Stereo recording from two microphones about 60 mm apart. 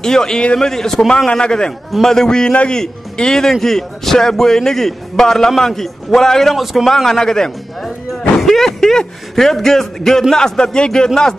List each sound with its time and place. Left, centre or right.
0.0 s a man's voice: centre
6.6 s speech: centre
6.9 s speech: centre